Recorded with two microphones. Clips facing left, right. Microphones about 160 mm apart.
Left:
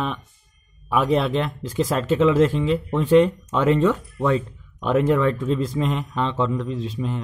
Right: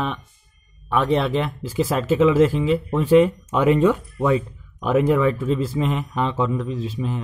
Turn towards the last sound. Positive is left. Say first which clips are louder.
# even
turn(degrees=-5)  # may be behind; listen again after turning